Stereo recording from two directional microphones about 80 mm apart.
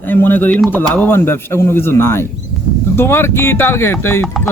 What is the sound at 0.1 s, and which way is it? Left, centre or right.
Speech, left.